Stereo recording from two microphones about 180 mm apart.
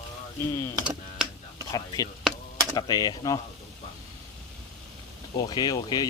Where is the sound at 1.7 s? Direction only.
20° left (ahead or behind).